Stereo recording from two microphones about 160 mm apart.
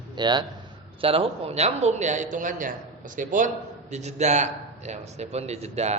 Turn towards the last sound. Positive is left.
turn(degrees=-40)  # may be behind; listen again after turning